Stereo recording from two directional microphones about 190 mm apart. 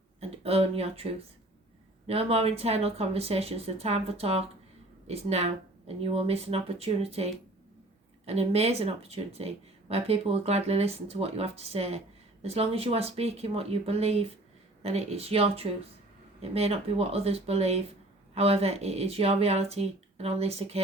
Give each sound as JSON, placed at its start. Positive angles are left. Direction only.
{"t": 0.2, "sound": "speech", "side_deg": -30}
{"t": 2.0, "sound": "speech", "side_deg": -30}